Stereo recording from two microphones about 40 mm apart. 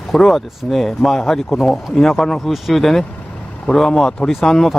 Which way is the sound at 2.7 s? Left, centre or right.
Centre.